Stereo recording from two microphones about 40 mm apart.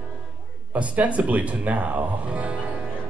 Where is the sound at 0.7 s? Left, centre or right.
Right.